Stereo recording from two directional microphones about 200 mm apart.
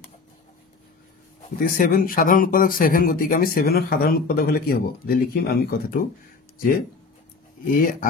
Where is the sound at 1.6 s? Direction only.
45° left (ahead or behind).